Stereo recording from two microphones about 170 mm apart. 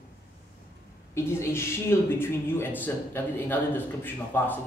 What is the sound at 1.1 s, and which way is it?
Speech, 15° left (ahead or behind).